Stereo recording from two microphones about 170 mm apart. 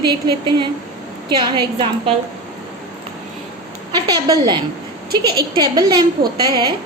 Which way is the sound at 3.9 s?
25° right (ahead or behind).